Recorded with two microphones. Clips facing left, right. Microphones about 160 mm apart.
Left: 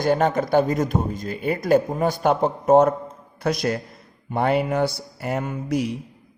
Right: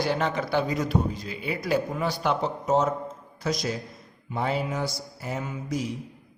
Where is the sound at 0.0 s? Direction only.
50° left (ahead or behind).